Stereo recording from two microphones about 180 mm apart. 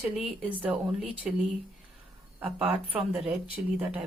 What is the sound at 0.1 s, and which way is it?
Speech, 5° right (ahead or behind).